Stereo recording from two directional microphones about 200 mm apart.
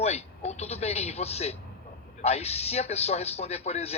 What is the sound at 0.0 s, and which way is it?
A man's voice, 30° left (ahead or behind).